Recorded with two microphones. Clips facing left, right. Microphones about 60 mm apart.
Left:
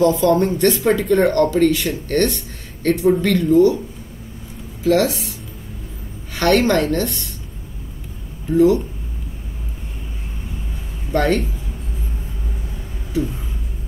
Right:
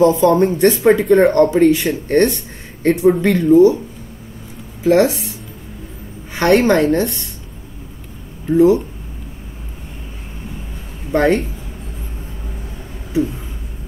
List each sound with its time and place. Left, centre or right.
0.0 s speech: right
0.3 s speech: centre
0.6 s speech: right
4.8 s speech: right
6.3 s speech: right
11.1 s speech: centre
13.1 s speech: centre